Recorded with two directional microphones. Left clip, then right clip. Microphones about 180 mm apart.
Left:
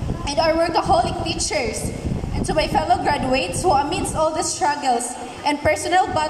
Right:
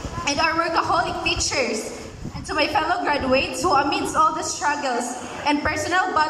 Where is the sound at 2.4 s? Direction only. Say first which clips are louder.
Left 1 dB; 35° left (ahead or behind).